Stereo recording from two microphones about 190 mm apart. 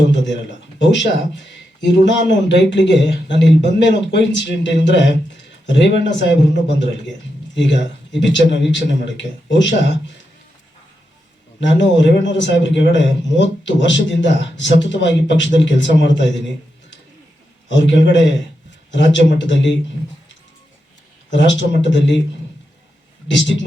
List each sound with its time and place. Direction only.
0.8 s a man's voice: 70° left (ahead or behind)
11.6 s a man's voice: 70° left (ahead or behind)
17.7 s a man's voice: 70° left (ahead or behind)
21.2 s a man's voice: 70° left (ahead or behind)
23.3 s a man's voice: 70° left (ahead or behind)